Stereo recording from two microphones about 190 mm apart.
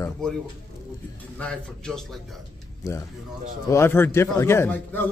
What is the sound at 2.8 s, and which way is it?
A man's voice, 15° left (ahead or behind).